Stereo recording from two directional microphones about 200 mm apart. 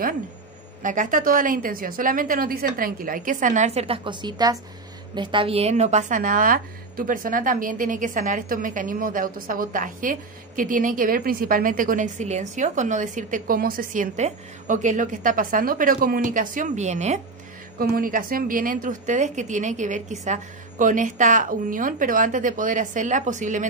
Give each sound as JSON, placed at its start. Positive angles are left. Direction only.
{"t": 0.8, "sound": "a woman's voice", "side_deg": -40}
{"t": 17.7, "sound": "a woman's voice", "side_deg": -45}